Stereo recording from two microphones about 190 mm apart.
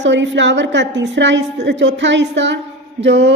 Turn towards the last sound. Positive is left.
turn(degrees=-65)  # may be behind; listen again after turning